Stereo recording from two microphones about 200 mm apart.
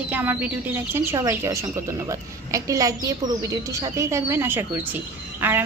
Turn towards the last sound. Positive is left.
turn(degrees=-10)  # may be behind; listen again after turning